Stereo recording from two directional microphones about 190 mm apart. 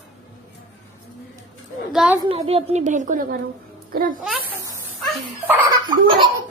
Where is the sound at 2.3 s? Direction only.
30° right (ahead or behind); by 4.2 s 45° right (ahead or behind).